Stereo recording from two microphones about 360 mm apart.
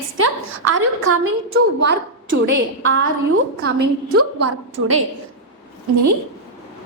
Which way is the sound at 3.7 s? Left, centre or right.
Right.